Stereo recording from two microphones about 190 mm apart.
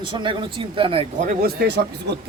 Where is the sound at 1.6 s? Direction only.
60° right (ahead or behind).